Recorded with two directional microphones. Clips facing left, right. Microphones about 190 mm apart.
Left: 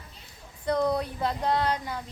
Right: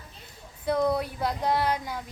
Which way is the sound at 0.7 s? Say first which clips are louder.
Right 1 dB; 5° right (ahead or behind).